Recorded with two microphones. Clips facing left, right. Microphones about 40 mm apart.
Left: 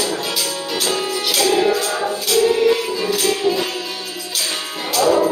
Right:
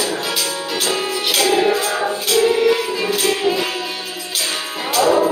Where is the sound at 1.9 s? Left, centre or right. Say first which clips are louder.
Right 1 dB; right.